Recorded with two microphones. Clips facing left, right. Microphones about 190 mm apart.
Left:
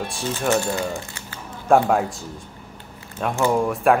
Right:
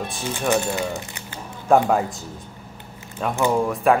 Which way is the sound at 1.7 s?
Centre (ahead or behind).